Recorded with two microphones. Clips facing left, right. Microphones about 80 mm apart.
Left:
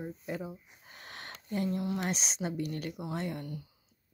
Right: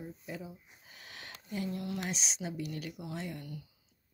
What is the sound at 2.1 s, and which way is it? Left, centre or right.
Speech, left.